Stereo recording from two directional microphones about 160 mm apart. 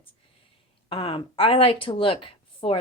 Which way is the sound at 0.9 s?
35° left (ahead or behind).